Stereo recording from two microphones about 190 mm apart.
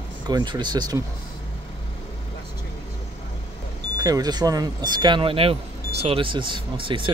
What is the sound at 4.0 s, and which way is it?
Speech, 20° right (ahead or behind).